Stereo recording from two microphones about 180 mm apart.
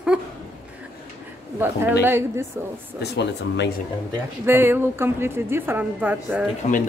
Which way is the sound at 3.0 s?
70° left (ahead or behind).